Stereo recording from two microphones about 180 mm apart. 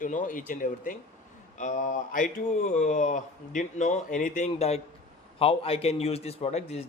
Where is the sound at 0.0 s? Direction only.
45° left (ahead or behind).